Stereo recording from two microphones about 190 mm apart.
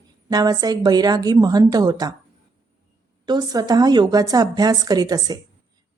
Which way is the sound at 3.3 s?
20° right (ahead or behind).